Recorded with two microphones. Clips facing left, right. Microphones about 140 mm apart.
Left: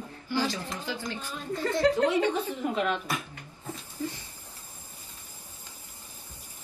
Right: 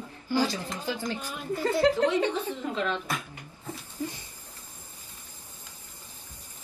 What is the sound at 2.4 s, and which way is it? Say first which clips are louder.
Speech: left 2 dB; 15° left (ahead or behind).